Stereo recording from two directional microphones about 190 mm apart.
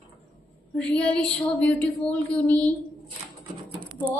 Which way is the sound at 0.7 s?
5° left (ahead or behind).